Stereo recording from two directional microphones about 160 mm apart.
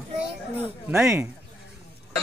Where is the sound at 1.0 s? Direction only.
5° right (ahead or behind).